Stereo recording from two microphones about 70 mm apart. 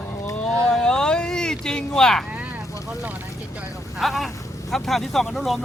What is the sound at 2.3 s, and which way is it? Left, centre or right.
Vehicle, right.